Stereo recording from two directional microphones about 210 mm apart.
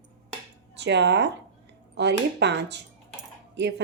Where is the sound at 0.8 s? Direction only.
55° right (ahead or behind).